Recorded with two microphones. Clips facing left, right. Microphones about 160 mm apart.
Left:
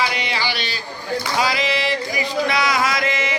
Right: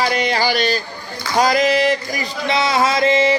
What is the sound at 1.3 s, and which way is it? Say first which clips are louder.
Singing: right 8 dB; 45° right (ahead or behind).